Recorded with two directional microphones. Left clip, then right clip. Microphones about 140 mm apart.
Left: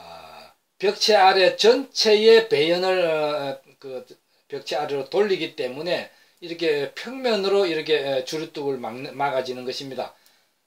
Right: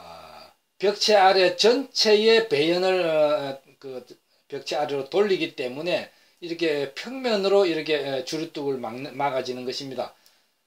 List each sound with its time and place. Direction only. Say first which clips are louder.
0.7 s speech: left 1 dB; 25° right (ahead or behind)